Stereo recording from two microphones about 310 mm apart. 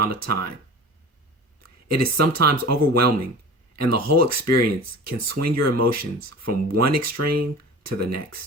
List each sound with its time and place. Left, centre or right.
0.0 s speech: right
1.6 s speech: right